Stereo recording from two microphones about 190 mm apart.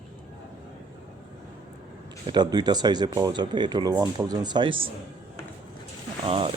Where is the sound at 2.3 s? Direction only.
20° right (ahead or behind).